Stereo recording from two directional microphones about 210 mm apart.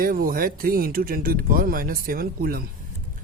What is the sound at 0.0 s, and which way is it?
Speech, 45° right (ahead or behind).